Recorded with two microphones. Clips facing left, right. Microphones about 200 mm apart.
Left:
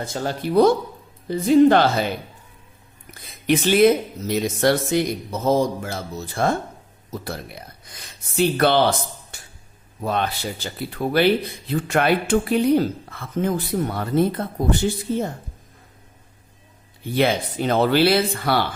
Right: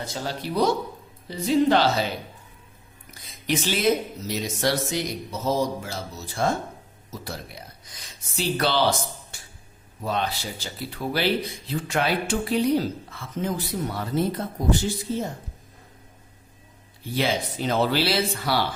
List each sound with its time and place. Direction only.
0.0 s speech: 50° left (ahead or behind)
17.0 s speech: 55° left (ahead or behind)